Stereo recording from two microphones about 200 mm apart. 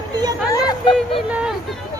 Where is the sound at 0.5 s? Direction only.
20° left (ahead or behind).